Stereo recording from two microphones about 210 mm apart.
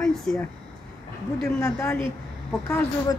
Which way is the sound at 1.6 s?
10° left (ahead or behind).